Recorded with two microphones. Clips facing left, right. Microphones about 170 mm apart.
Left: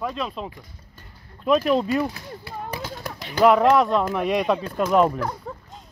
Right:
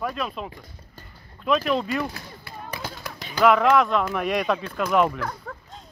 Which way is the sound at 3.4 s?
35° left (ahead or behind).